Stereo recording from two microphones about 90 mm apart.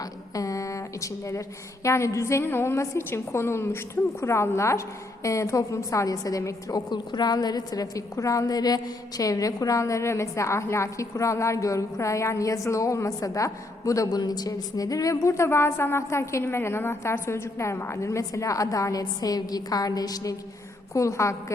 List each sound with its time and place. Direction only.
0.0 s a woman's voice: 40° left (ahead or behind)
6.9 s a woman's voice: 55° left (ahead or behind); by 21.3 s 35° left (ahead or behind)